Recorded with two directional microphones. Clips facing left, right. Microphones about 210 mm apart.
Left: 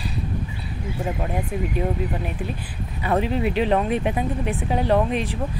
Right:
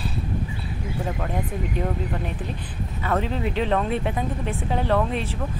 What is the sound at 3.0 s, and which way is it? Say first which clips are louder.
Speech: left 3 dB; 15° left (ahead or behind).